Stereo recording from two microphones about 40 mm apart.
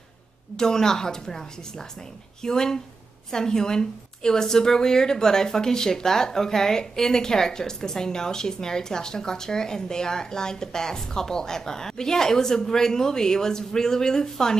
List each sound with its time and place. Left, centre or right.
0.6 s a woman's voice: centre